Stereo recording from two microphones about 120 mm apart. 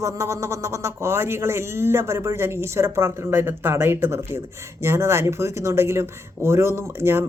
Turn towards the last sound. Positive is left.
turn(degrees=-20)  # may be behind; listen again after turning